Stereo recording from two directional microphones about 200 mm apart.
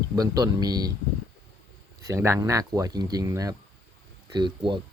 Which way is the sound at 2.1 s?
15° right (ahead or behind).